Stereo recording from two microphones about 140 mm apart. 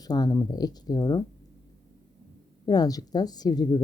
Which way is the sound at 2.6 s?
30° left (ahead or behind).